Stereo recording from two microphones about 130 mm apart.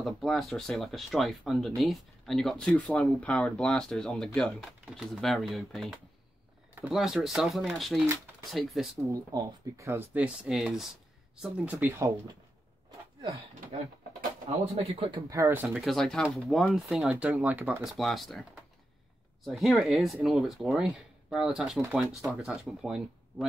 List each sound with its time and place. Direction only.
0.0 s speech: centre (ahead or behind)
9.1 s speech: 25° right (ahead or behind)
14.8 s speech: 45° right (ahead or behind)
15.1 s speech: 25° right (ahead or behind)
15.4 s speech: 10° right (ahead or behind)
17.8 s speech: centre (ahead or behind)